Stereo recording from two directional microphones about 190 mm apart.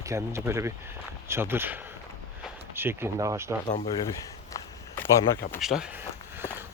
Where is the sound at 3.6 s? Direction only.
35° left (ahead or behind).